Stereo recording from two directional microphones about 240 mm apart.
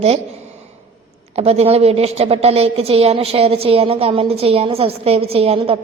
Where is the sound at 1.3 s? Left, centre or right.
Right.